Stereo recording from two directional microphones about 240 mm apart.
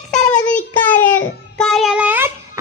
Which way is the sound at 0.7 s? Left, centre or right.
Centre.